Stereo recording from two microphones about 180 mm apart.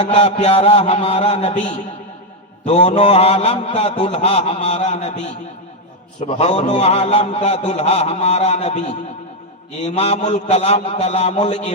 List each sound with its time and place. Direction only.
0.1 s a man's voice: 35° left (ahead or behind)